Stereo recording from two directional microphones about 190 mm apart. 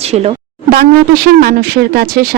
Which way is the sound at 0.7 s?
50° right (ahead or behind).